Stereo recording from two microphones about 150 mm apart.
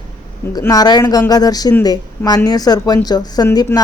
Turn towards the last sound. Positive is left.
turn(degrees=25)  # may be behind; listen again after turning